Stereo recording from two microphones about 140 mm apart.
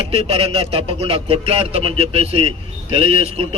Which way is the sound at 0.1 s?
45° right (ahead or behind).